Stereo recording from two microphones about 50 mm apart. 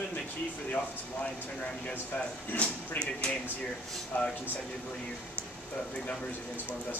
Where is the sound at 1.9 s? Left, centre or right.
Left.